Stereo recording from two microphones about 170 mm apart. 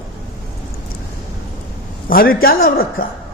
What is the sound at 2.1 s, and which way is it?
Speech, 60° left (ahead or behind).